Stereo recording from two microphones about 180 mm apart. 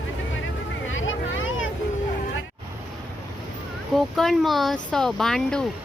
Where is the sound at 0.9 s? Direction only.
90° left.